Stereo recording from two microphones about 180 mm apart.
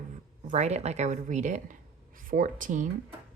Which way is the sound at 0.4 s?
40° right (ahead or behind).